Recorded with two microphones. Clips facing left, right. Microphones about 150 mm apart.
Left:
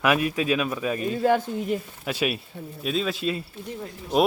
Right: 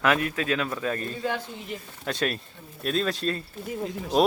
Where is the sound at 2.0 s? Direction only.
10° left (ahead or behind).